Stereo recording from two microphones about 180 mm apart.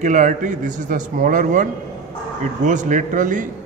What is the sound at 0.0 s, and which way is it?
A man's voice, 45° right (ahead or behind).